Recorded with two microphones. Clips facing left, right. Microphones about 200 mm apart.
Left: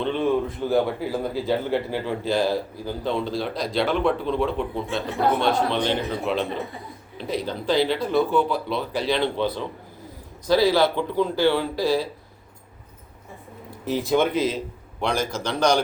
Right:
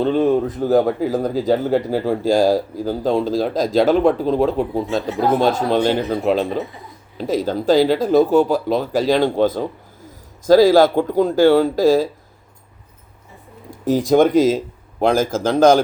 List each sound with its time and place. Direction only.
0.0 s a man's voice: 40° right (ahead or behind)
13.7 s a sound: 45° right (ahead or behind)
14.1 s a man's voice: 45° right (ahead or behind)